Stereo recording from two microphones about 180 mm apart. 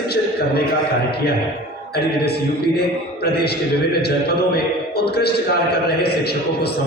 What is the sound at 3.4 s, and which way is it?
A man's voice, 65° left (ahead or behind).